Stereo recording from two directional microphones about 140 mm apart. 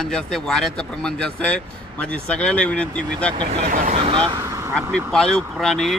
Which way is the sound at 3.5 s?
60° right (ahead or behind).